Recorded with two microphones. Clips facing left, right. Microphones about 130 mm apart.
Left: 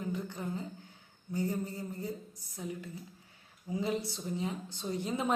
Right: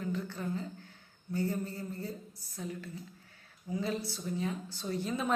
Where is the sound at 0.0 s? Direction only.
15° left (ahead or behind).